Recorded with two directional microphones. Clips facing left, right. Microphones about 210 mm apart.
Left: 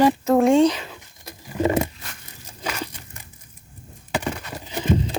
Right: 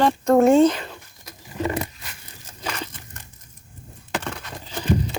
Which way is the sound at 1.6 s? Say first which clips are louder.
Left 6 dB; 25° left (ahead or behind).